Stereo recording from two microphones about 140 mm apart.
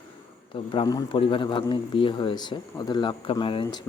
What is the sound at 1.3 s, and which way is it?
A man's voice, 35° left (ahead or behind).